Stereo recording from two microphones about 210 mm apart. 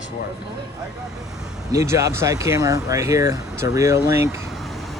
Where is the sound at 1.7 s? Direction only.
15° right (ahead or behind).